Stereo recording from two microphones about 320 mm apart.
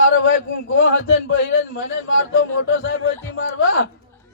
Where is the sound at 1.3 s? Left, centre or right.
Left.